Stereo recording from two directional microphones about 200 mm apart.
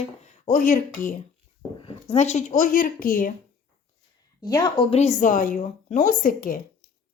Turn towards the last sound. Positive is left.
turn(degrees=45)  # may be behind; listen again after turning